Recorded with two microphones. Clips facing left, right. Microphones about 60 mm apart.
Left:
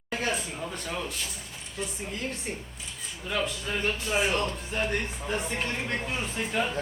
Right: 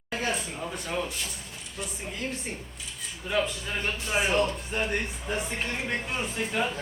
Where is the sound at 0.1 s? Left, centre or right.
Centre.